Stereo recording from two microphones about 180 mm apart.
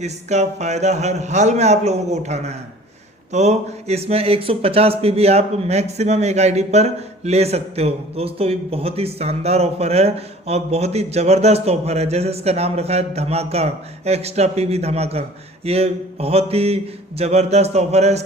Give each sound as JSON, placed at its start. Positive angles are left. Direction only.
{"t": 0.0, "sound": "speech", "side_deg": -40}